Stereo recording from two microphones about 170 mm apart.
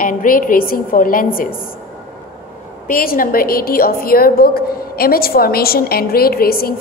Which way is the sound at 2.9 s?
55° left (ahead or behind).